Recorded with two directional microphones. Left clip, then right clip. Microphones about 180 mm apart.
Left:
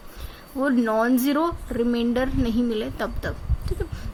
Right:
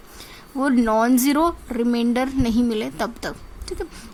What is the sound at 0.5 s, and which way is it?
A woman's voice, 40° right (ahead or behind).